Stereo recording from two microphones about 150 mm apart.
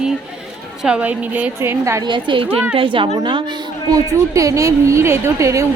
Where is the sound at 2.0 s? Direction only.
30° right (ahead or behind).